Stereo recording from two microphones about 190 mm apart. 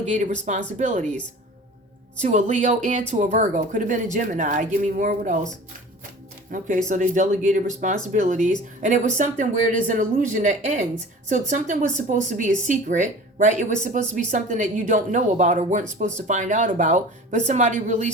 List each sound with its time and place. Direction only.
0.0 s speech: 40° right (ahead or behind)
2.1 s speech: 40° right (ahead or behind)
6.5 s speech: 45° right (ahead or behind)